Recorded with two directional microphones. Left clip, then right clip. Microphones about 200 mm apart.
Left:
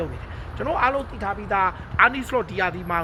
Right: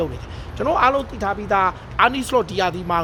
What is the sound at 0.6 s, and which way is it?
Speech, 35° right (ahead or behind).